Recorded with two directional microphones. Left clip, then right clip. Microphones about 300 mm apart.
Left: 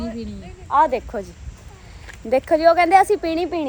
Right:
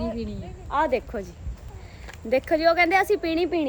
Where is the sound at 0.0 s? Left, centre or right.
Centre.